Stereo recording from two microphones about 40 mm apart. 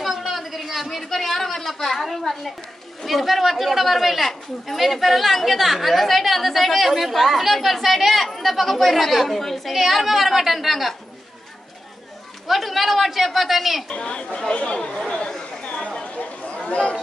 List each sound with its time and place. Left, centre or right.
0.0 s speech: centre
12.4 s speech: centre
13.8 s speech: left
15.6 s a sound: left
16.6 s speech: left